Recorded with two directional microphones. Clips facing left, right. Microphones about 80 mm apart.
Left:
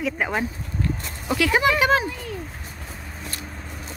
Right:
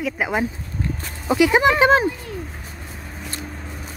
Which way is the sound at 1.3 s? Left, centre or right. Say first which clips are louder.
Right 4 dB; centre.